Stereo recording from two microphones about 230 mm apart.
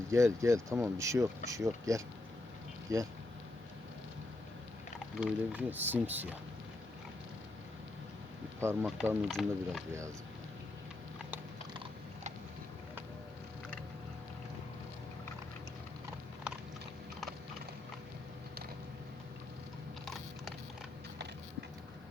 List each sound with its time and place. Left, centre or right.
0.1 s speech: centre
5.1 s speech: centre
9.0 s speech: centre
11.7 s biting: right